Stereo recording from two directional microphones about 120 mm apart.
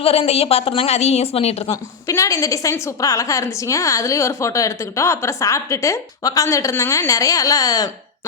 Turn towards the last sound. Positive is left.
turn(degrees=30)  # may be behind; listen again after turning